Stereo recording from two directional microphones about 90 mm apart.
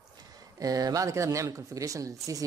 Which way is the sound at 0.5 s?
40° right (ahead or behind).